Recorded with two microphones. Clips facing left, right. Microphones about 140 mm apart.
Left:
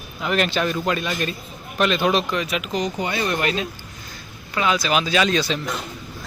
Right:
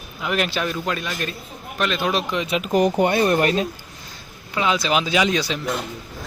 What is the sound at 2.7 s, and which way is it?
Speech, 55° right (ahead or behind).